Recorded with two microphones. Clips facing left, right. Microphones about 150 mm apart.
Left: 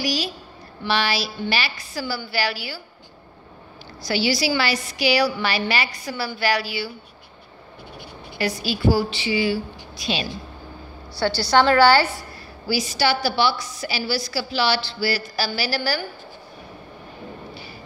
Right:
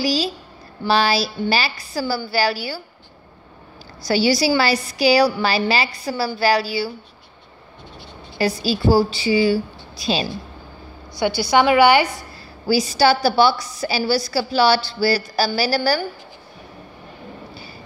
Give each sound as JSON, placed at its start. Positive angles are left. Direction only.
{"t": 0.0, "sound": "a woman's voice", "side_deg": -30}
{"t": 4.0, "sound": "a woman's voice", "side_deg": -40}
{"t": 8.4, "sound": "a woman's voice", "side_deg": -35}
{"t": 11.1, "sound": "a woman's voice", "side_deg": -15}
{"t": 12.6, "sound": "a woman's voice", "side_deg": -40}